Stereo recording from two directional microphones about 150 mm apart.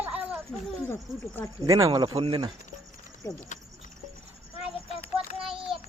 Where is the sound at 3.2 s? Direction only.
20° left (ahead or behind).